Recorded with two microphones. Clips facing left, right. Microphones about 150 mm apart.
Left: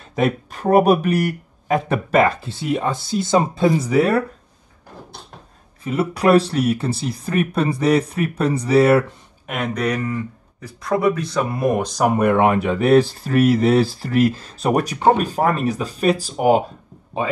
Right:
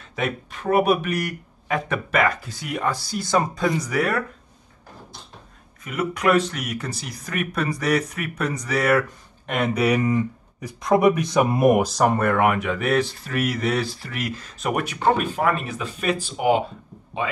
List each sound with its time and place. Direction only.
0.0 s speech: 40° left (ahead or behind)
5.9 s speech: 30° left (ahead or behind)
9.5 s speech: 5° right (ahead or behind)
11.9 s speech: 5° left (ahead or behind)
12.2 s speech: 25° left (ahead or behind); by 17.3 s 40° left (ahead or behind)